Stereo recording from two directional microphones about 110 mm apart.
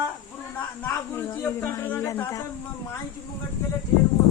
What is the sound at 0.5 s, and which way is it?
Speech, 20° left (ahead or behind).